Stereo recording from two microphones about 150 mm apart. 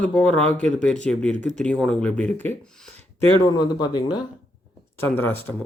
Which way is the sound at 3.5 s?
25° left (ahead or behind).